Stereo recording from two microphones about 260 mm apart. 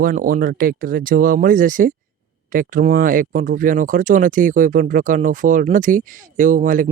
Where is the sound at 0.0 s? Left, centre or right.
Right.